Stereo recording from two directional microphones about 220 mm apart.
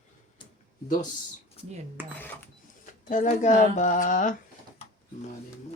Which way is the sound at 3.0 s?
35° left (ahead or behind).